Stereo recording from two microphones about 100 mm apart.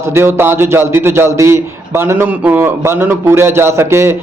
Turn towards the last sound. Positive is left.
turn(degrees=-25)  # may be behind; listen again after turning